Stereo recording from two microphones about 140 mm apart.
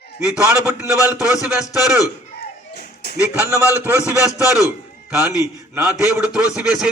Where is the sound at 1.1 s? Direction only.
5° right (ahead or behind).